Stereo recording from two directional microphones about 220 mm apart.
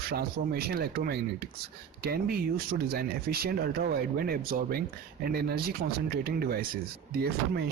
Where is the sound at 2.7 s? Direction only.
45° right (ahead or behind).